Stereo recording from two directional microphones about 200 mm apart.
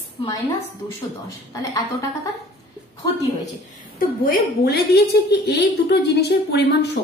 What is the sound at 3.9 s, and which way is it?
A woman's voice, 45° left (ahead or behind).